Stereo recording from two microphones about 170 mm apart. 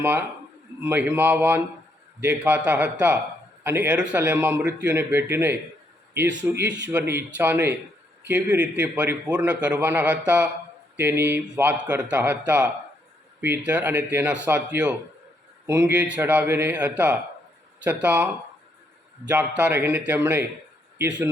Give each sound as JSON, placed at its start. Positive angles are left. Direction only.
{"t": 0.0, "sound": "a man's voice", "side_deg": -10}
{"t": 6.7, "sound": "speech", "side_deg": -90}
{"t": 6.9, "sound": "a man's voice", "side_deg": -10}
{"t": 13.7, "sound": "a man's voice", "side_deg": -10}
{"t": 19.3, "sound": "a man's voice", "side_deg": -10}